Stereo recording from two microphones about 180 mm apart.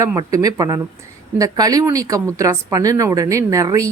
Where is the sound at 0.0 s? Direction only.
20° right (ahead or behind).